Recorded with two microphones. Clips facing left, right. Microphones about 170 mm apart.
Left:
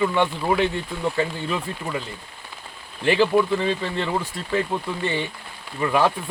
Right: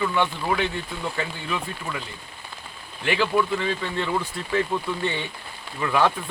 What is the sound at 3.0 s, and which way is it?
Speech, 35° left (ahead or behind).